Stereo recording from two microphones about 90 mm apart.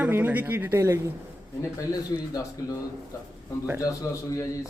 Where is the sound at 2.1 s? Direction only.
50° left (ahead or behind).